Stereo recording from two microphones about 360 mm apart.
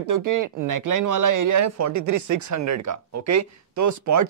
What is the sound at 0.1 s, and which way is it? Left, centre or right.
Speech, right.